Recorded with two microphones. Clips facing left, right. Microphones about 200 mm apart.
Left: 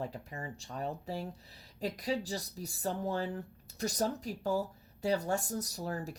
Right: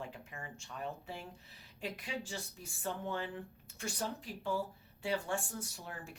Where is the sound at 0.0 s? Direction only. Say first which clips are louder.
Left 6 dB; 40° left (ahead or behind).